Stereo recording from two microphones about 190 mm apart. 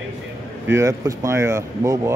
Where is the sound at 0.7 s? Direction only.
15° right (ahead or behind).